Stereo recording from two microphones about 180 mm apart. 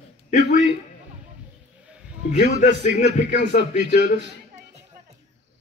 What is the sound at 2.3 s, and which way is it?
A man's voice, 45° left (ahead or behind).